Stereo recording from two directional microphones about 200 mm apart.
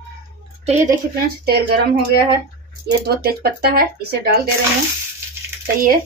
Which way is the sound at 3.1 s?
50° right (ahead or behind).